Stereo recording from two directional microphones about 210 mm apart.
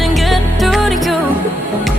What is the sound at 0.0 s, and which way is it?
Music, centre (ahead or behind).